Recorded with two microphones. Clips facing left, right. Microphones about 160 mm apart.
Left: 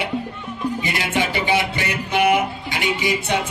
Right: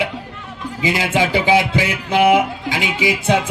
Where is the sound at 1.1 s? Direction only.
90° right.